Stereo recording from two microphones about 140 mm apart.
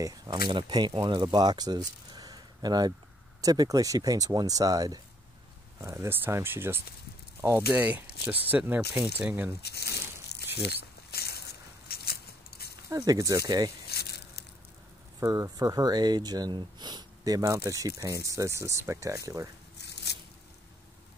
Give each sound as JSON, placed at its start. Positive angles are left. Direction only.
{"t": 0.0, "sound": "speech", "side_deg": -25}
{"t": 9.3, "sound": "speech", "side_deg": -15}
{"t": 11.9, "sound": "a sound", "side_deg": 90}
{"t": 12.9, "sound": "speech", "side_deg": -25}
{"t": 15.1, "sound": "speech", "side_deg": -20}